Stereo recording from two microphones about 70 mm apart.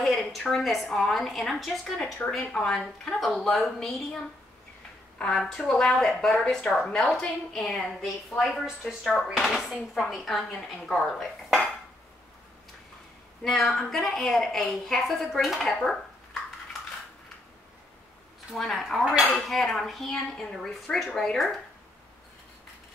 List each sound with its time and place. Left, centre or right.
0.0 s a sound: centre
0.5 s a woman's voice: centre
2.2 s a woman's voice: left; by 4.2 s centre
5.2 s a woman's voice: centre
13.4 s a woman's voice: centre
18.5 s a woman's voice: centre